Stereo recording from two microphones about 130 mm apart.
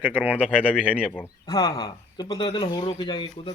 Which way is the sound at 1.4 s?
30° left (ahead or behind).